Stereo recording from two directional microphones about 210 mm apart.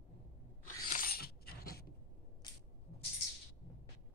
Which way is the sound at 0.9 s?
45° left (ahead or behind).